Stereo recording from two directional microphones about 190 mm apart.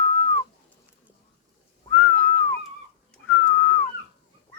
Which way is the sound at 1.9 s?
10° left (ahead or behind).